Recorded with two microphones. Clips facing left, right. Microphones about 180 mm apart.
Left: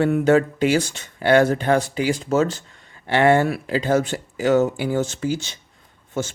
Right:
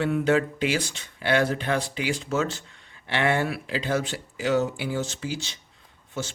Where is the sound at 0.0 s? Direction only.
45° left (ahead or behind).